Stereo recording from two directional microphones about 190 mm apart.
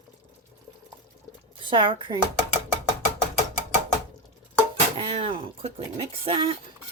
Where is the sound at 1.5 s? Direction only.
25° right (ahead or behind).